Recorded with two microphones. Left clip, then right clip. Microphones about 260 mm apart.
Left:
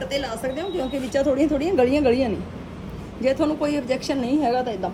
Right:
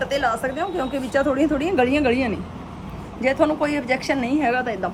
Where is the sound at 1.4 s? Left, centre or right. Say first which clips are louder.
Even; right.